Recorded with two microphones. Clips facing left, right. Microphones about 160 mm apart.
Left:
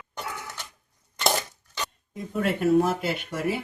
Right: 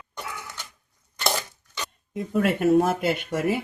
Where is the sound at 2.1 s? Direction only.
60° right (ahead or behind).